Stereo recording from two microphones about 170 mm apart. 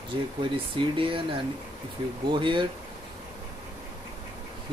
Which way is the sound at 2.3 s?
30° right (ahead or behind).